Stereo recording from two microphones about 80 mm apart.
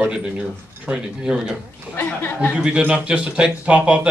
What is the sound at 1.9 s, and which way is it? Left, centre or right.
Speech, left.